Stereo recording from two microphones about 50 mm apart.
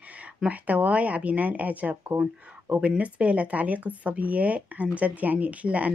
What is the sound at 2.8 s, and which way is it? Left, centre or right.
Speech, right.